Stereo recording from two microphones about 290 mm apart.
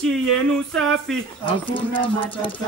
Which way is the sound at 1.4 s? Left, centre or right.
Centre.